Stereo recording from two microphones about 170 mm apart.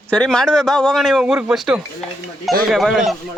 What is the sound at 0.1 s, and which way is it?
A man's voice, 5° left (ahead or behind).